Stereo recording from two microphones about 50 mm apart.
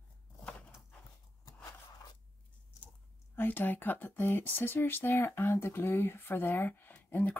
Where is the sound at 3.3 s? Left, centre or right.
Left.